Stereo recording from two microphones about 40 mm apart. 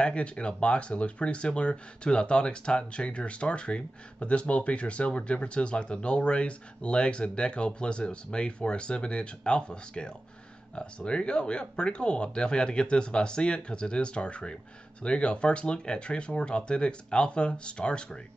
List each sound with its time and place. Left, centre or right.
0.0 s speech: left